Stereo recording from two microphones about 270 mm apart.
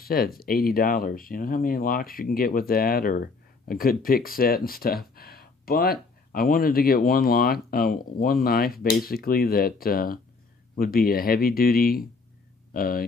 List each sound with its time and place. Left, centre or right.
0.0 s speech: left